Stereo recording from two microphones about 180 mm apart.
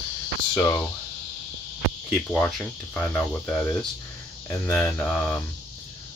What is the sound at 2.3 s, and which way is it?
Speech, 5° left (ahead or behind).